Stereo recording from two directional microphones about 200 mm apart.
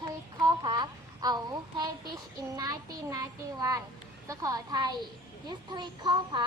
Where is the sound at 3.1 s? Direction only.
15° right (ahead or behind).